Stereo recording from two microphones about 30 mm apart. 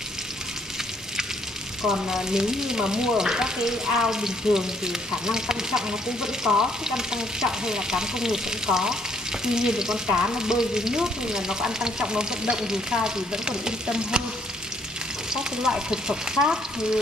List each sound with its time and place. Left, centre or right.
1.9 s frying: centre
15.3 s frying: centre